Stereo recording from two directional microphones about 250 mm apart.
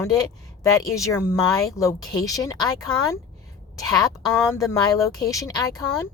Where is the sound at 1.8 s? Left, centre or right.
Centre.